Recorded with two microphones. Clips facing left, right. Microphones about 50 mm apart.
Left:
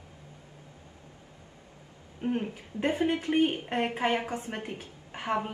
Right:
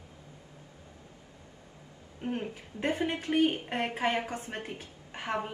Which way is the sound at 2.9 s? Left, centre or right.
Left.